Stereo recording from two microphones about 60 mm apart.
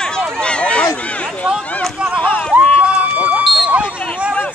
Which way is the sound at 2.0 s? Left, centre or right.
Centre.